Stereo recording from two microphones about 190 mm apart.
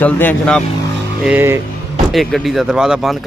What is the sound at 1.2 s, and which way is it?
Speech, 10° right (ahead or behind).